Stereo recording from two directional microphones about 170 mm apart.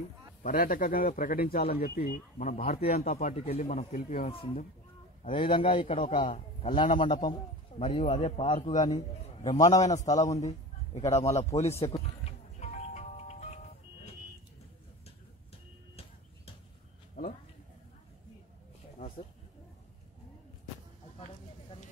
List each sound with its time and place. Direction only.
0.4 s a man's voice: 55° left (ahead or behind)
4.3 s a man's voice: 35° left (ahead or behind)
8.8 s a man's voice: 25° left (ahead or behind)
11.0 s a man's voice: 40° left (ahead or behind)
11.2 s a man's voice: 15° left (ahead or behind)
11.8 s music: 35° left (ahead or behind)
17.2 s a sound: 55° left (ahead or behind)